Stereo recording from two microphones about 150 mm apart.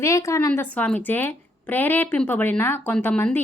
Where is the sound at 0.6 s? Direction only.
10° left (ahead or behind).